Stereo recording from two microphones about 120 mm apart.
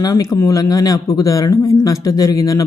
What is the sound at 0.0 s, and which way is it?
Speech, 30° left (ahead or behind).